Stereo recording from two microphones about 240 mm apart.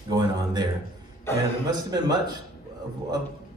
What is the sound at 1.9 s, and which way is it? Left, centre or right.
Speech, centre.